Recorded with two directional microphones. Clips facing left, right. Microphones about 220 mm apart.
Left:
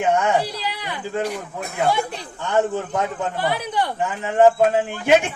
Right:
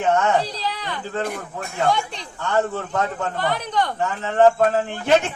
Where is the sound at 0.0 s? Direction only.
15° left (ahead or behind).